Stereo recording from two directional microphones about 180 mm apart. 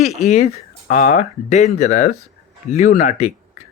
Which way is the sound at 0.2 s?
40° left (ahead or behind).